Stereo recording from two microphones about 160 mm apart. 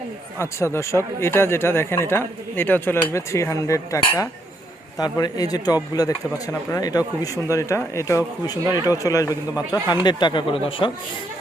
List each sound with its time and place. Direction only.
0.3 s speech: 15° left (ahead or behind); by 10.9 s 35° left (ahead or behind)